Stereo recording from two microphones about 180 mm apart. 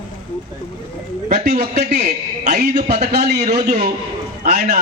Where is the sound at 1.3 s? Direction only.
40° right (ahead or behind).